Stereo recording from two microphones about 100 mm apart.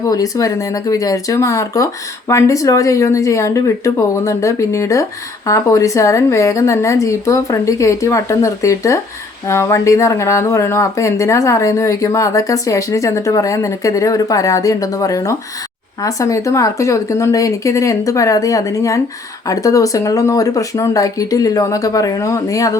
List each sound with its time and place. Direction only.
0.0 s speech: 35° left (ahead or behind)